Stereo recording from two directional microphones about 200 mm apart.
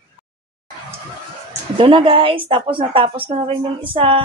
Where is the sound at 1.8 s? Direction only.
25° right (ahead or behind).